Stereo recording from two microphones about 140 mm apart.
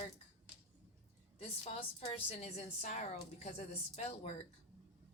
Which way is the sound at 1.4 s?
45° left (ahead or behind).